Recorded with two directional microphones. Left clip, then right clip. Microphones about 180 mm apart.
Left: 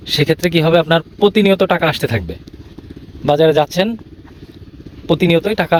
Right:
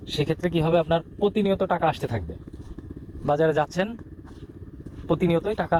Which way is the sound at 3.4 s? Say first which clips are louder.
Left 11 dB; 50° left (ahead or behind).